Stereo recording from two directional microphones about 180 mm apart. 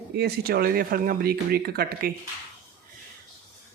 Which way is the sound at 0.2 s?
60° right (ahead or behind).